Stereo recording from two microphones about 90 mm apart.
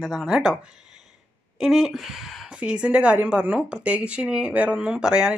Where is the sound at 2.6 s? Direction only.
15° right (ahead or behind).